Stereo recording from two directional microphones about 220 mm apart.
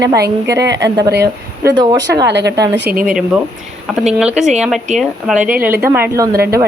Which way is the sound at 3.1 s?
5° right (ahead or behind).